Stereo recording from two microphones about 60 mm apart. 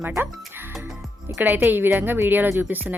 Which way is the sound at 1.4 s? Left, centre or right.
Right.